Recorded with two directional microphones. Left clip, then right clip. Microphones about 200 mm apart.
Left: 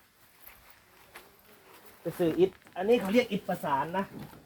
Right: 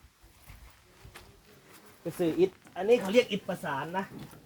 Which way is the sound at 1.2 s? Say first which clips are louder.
Left 1 dB; 20° left (ahead or behind).